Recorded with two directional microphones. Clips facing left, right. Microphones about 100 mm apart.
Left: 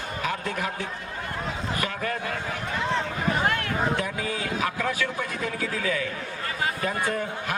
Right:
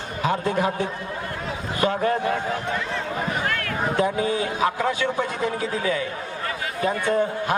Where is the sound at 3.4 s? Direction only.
20° left (ahead or behind).